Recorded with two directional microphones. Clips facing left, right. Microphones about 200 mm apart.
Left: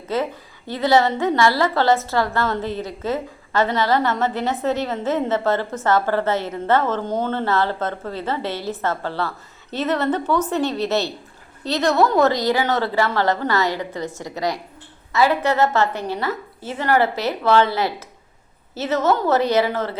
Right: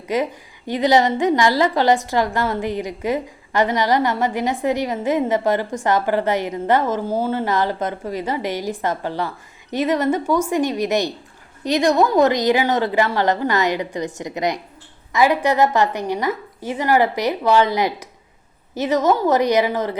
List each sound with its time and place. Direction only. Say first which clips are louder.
0.1 s a woman's voice: right 2 dB; 15° right (ahead or behind)